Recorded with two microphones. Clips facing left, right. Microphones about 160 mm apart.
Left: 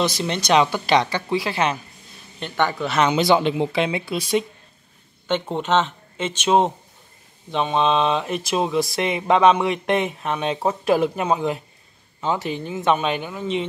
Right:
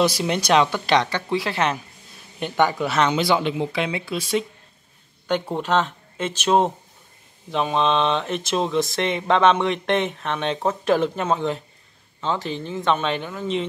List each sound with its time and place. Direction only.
0.0 s speech: 10° right (ahead or behind)
0.6 s speech: 5° left (ahead or behind)
2.4 s speech: 15° right (ahead or behind)
3.2 s speech: 25° left (ahead or behind)
4.0 s speech: 15° left (ahead or behind)
5.3 s speech: 5° right (ahead or behind)